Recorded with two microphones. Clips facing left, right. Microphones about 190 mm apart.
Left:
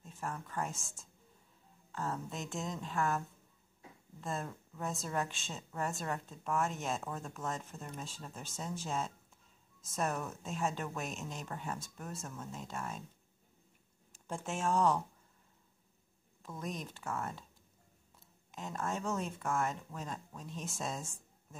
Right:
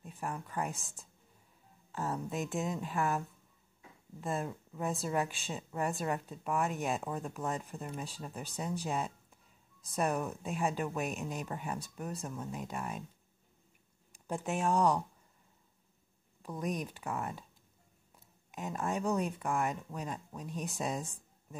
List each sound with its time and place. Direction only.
0.0 s speech: 15° right (ahead or behind)
14.2 s speech: 15° right (ahead or behind)
16.4 s speech: 15° right (ahead or behind)